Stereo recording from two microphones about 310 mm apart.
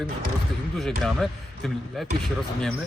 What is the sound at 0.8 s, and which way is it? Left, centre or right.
Speech, centre.